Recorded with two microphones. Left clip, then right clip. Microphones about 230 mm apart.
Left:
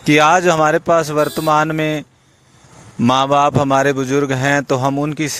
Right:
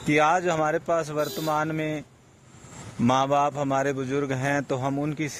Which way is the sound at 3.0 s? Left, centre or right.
Left.